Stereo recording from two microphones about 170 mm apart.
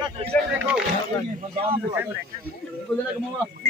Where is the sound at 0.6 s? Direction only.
10° right (ahead or behind).